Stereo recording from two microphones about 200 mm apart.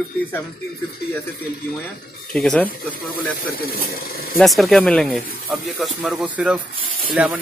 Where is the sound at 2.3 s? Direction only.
5° left (ahead or behind).